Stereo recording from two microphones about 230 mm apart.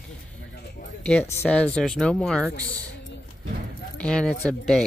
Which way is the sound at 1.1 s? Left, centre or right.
Centre.